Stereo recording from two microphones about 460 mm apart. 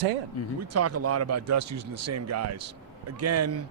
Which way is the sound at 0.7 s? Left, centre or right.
Right.